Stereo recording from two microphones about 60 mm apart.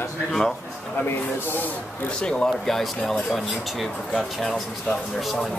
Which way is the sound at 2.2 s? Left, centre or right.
Centre.